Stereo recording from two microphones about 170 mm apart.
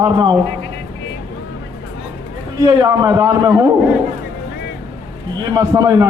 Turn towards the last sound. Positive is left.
turn(degrees=-20)  # may be behind; listen again after turning